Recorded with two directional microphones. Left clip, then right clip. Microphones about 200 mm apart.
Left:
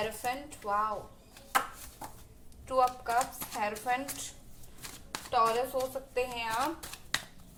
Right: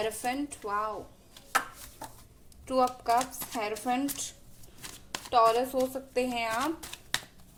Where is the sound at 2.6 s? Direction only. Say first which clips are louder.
Right 2 dB; 50° right (ahead or behind).